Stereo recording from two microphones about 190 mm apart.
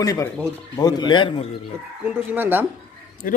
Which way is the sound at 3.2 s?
45° left (ahead or behind).